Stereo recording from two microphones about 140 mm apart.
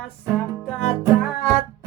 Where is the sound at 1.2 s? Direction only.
5° right (ahead or behind).